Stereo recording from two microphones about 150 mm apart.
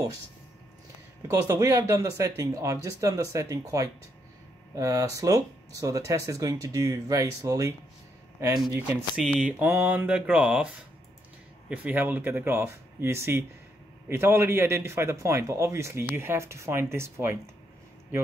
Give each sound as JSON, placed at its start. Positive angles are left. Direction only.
{"t": 1.2, "sound": "speech", "side_deg": -20}
{"t": 8.7, "sound": "a man's voice", "side_deg": -10}
{"t": 11.7, "sound": "a man's voice", "side_deg": -10}